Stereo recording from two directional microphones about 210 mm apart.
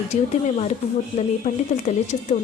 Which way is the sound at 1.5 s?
30° left (ahead or behind).